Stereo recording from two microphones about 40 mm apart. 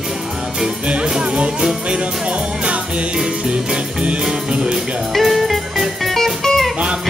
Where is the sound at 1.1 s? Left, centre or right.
Right.